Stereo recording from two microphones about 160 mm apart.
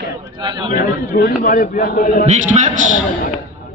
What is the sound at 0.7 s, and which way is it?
A man's voice, 65° left (ahead or behind).